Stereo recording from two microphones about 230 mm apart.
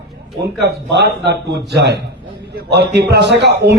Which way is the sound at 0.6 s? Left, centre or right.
Right.